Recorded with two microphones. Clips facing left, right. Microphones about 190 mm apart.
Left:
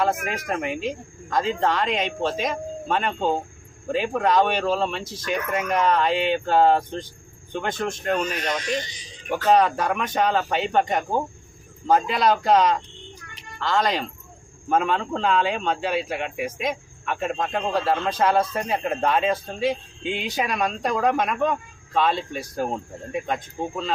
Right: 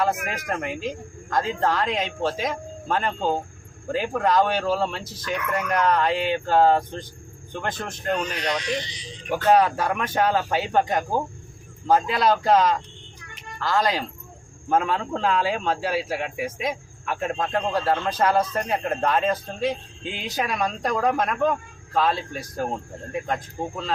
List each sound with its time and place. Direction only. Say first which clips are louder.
0.0 s a man's voice: left 1 dB; centre (ahead or behind)
8.8 s a man's voice: even; 45° left (ahead or behind)
9.3 s a man's voice: even; 5° right (ahead or behind)